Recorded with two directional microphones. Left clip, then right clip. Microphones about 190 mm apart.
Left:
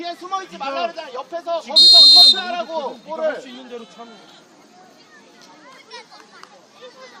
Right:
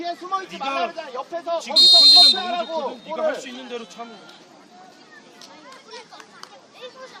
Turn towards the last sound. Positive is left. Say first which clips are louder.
# left 1 dB
turn(degrees=15)  # may be behind; listen again after turning